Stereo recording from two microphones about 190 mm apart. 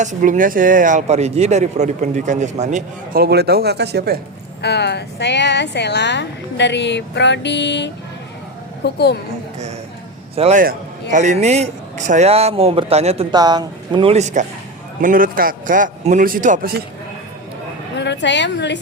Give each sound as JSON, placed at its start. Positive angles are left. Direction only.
{"t": 0.0, "sound": "speech", "side_deg": -45}
{"t": 4.6, "sound": "a woman's voice", "side_deg": 65}
{"t": 10.3, "sound": "a man's voice", "side_deg": -30}
{"t": 10.6, "sound": "a man's voice", "side_deg": -45}
{"t": 13.3, "sound": "speech", "side_deg": -20}
{"t": 17.9, "sound": "a woman's voice", "side_deg": 65}